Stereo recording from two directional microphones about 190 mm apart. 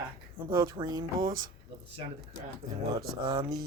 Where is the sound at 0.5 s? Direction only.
20° right (ahead or behind).